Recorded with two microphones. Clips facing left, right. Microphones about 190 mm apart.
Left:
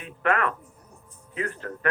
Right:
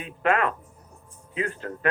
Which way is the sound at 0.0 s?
20° right (ahead or behind).